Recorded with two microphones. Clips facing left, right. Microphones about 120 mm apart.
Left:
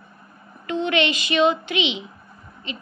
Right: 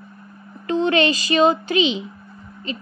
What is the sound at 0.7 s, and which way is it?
A child's voice, 35° right (ahead or behind).